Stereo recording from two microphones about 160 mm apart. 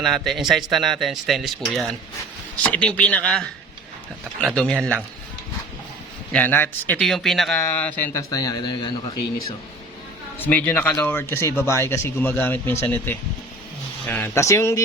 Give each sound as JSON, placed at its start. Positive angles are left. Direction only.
{"t": 0.0, "sound": "speech", "side_deg": 0}
{"t": 6.3, "sound": "speech", "side_deg": 10}
{"t": 8.3, "sound": "a man's voice", "side_deg": 25}
{"t": 10.3, "sound": "speech", "side_deg": 10}